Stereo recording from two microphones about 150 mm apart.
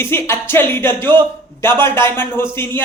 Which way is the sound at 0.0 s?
15° left (ahead or behind).